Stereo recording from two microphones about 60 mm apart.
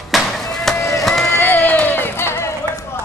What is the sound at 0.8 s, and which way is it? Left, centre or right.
Vehicle, left.